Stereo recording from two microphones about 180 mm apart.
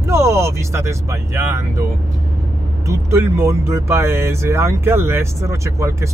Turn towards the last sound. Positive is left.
turn(degrees=-15)  # may be behind; listen again after turning